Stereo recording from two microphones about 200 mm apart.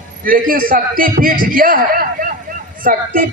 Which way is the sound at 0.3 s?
45° right (ahead or behind).